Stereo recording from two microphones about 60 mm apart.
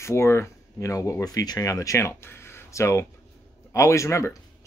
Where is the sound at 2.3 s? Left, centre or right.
Left.